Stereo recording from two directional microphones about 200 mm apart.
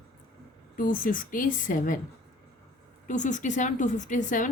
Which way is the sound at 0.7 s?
40° left (ahead or behind).